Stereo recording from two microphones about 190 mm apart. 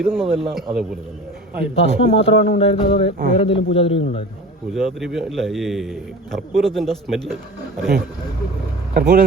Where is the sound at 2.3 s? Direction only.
35° left (ahead or behind).